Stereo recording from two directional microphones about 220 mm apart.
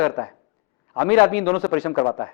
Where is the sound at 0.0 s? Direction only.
15° left (ahead or behind).